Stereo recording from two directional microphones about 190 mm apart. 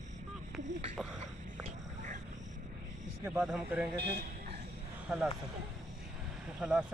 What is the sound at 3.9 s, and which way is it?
Speech, 60° right (ahead or behind).